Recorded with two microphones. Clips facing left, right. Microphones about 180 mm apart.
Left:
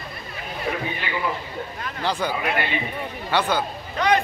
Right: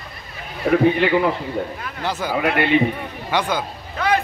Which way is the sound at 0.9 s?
65° right (ahead or behind).